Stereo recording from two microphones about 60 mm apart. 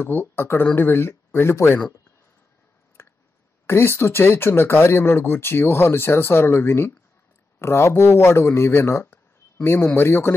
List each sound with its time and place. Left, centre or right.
0.0 s speech: left
3.0 s a sound: left
3.6 s speech: left